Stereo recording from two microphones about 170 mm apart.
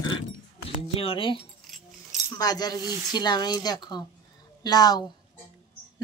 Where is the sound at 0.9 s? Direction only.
30° left (ahead or behind).